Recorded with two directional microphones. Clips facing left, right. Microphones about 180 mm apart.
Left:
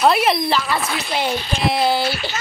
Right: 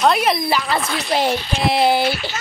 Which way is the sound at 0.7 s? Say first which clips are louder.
Right 2 dB; 25° right (ahead or behind).